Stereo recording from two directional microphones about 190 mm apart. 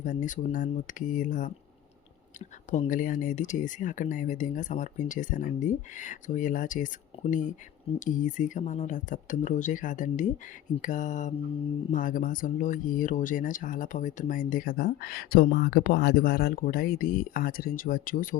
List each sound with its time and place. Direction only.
0.0 s speech: 45° left (ahead or behind)
2.9 s speech: 45° left (ahead or behind)
10.8 s a sound: 40° left (ahead or behind)
11.9 s speech: 45° left (ahead or behind)